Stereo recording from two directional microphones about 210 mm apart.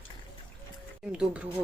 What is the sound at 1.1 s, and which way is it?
Speech, 5° right (ahead or behind).